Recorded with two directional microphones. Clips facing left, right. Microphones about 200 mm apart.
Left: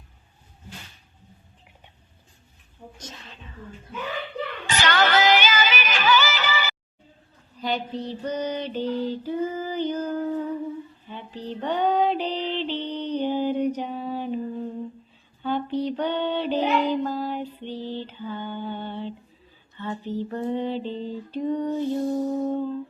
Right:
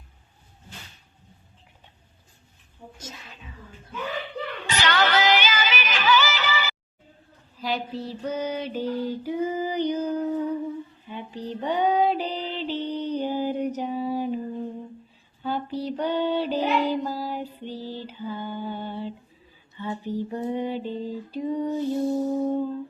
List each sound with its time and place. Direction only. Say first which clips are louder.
3.0 s a sound: right 1 dB; 10° right (ahead or behind)
4.8 s music: left 1 dB; 50° left (ahead or behind)
7.6 s female singing: left 1 dB; 5° right (ahead or behind)
15.4 s child singing: left 3 dB; 5° right (ahead or behind)
17.6 s lullaby: left 2 dB; 10° right (ahead or behind)
19.7 s a sound: even; 10° right (ahead or behind)